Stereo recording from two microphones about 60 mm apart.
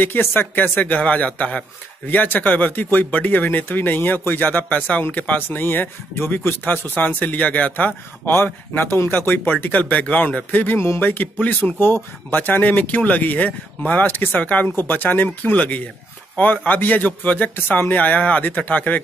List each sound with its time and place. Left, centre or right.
0.0 s speech: left
11.8 s speech: left